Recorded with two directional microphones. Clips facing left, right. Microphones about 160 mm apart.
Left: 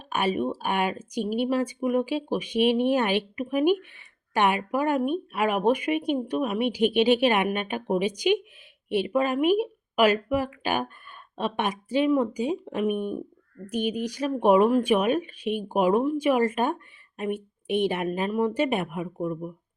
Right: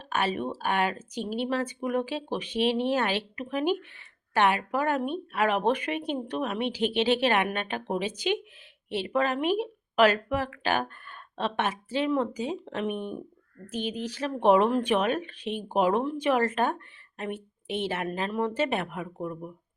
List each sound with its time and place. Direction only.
0.1 s a woman's voice: 15° left (ahead or behind)